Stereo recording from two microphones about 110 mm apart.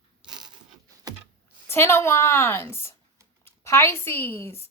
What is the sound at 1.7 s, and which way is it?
Speech, 25° left (ahead or behind).